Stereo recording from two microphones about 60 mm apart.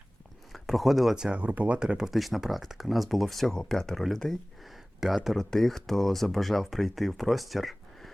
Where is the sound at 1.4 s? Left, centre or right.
Right.